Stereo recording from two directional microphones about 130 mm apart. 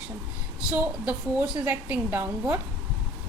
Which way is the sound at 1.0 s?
5° right (ahead or behind).